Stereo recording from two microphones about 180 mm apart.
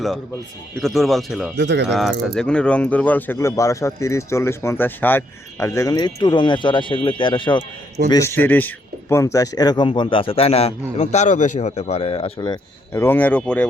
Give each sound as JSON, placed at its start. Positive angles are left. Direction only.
{"t": 0.8, "sound": "speech", "side_deg": 0}
{"t": 1.5, "sound": "speech", "side_deg": -80}
{"t": 1.9, "sound": "speech", "side_deg": 0}
{"t": 8.1, "sound": "speech", "side_deg": 15}